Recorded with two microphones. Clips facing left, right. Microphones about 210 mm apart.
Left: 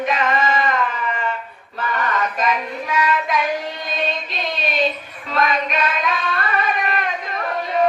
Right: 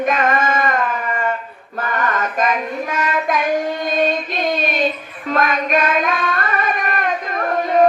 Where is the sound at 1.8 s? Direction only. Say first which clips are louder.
Right 1 dB; 50° right (ahead or behind).